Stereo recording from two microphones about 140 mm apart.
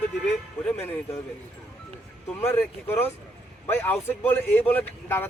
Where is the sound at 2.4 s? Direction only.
15° left (ahead or behind).